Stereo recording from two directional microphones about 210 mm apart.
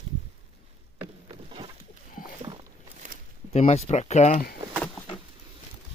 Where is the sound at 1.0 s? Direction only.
25° right (ahead or behind).